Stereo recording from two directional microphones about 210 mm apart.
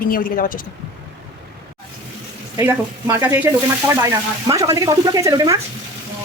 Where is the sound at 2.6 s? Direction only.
15° right (ahead or behind).